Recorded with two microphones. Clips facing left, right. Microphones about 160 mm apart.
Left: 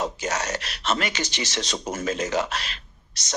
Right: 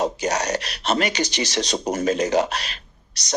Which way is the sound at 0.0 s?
35° right (ahead or behind).